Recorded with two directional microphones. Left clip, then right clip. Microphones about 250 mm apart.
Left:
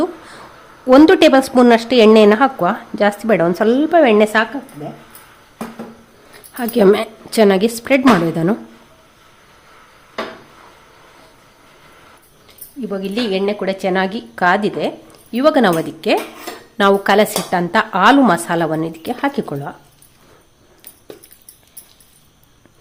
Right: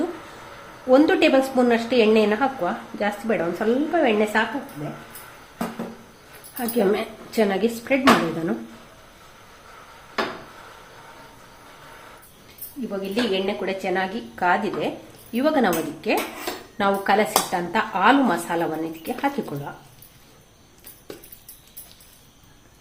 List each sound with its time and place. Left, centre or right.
0.9 s a woman's voice: left
6.6 s a woman's voice: left
13.0 s a woman's voice: left